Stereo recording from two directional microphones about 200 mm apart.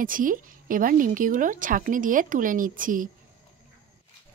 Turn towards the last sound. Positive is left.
turn(degrees=-40)  # may be behind; listen again after turning